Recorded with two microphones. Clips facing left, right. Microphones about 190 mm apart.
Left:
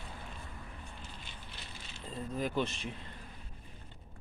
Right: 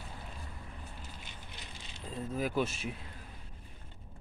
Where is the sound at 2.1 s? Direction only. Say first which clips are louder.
Right 1 dB; 5° right (ahead or behind).